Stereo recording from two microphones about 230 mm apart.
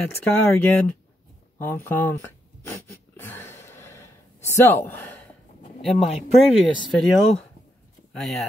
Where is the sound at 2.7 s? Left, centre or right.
Centre.